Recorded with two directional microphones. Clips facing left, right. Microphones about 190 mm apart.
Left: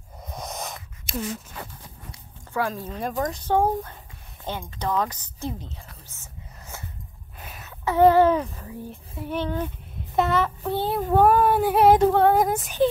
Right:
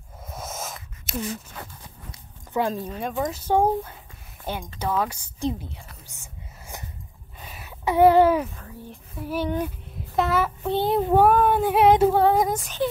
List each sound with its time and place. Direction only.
0.2 s a sound: centre (ahead or behind)
2.5 s speech: 20° right (ahead or behind)
2.9 s a woman's voice: centre (ahead or behind)
7.3 s a sound: centre (ahead or behind)
7.6 s speech: 15° right (ahead or behind)
8.5 s child singing: 5° left (ahead or behind)
10.7 s speech: 20° right (ahead or behind)
11.2 s child singing: centre (ahead or behind)